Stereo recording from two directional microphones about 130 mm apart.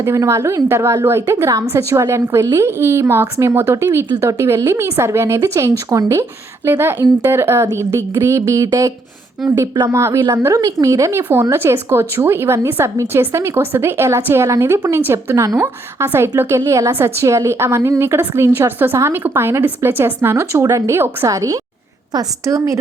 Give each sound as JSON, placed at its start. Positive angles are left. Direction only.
{"t": 0.0, "sound": "a woman's voice", "side_deg": -20}
{"t": 9.4, "sound": "speech", "side_deg": 0}
{"t": 9.7, "sound": "a woman's voice", "side_deg": -25}